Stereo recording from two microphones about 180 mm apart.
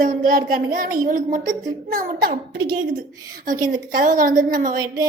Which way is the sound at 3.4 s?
50° right (ahead or behind).